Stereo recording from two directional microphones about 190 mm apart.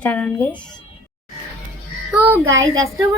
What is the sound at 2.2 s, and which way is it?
Speech, 10° right (ahead or behind).